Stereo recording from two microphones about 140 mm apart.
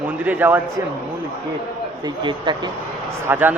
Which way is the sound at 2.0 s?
30° right (ahead or behind).